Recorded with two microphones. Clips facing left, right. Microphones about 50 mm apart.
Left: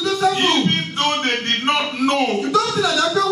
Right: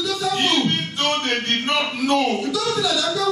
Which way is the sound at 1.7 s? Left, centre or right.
Left.